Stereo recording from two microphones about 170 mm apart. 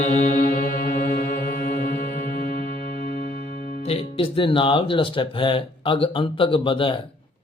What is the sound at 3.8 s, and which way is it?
Speech, 35° left (ahead or behind).